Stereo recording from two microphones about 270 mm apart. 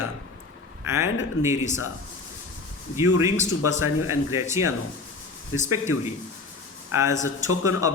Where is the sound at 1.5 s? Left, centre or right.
Left.